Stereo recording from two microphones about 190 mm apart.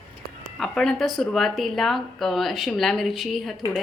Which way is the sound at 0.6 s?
Centre (ahead or behind).